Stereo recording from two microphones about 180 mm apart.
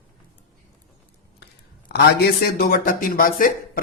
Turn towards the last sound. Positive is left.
turn(degrees=50)  # may be behind; listen again after turning